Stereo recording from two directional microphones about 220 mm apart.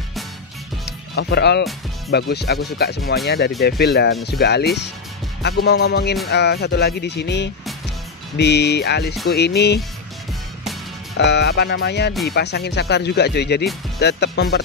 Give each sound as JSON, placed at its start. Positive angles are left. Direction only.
{"t": 0.8, "sound": "music", "side_deg": 50}
{"t": 2.0, "sound": "speech", "side_deg": 50}
{"t": 11.1, "sound": "speech", "side_deg": 50}